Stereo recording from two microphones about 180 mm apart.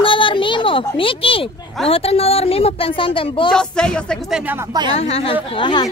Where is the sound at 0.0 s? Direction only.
30° left (ahead or behind).